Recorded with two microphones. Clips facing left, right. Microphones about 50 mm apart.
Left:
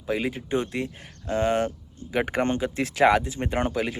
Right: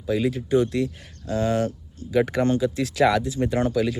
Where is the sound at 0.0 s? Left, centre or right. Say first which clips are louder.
Right 4 dB; left.